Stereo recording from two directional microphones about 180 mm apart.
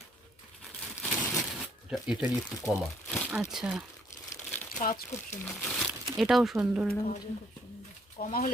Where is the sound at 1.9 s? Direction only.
5° right (ahead or behind).